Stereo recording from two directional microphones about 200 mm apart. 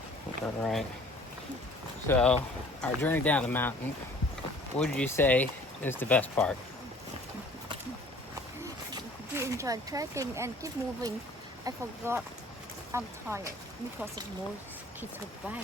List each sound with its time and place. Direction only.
0.4 s speech: 5° left (ahead or behind)
2.0 s speech: 5° left (ahead or behind)
4.8 s speech: 10° left (ahead or behind)
8.9 s speech: 15° right (ahead or behind)